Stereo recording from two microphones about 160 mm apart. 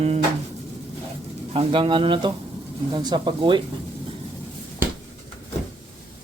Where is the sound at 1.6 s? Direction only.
35° right (ahead or behind).